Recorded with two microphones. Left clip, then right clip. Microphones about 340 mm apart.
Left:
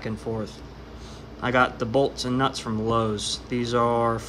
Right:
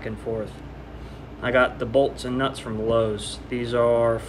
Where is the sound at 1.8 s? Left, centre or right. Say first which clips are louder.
Right 2 dB; centre.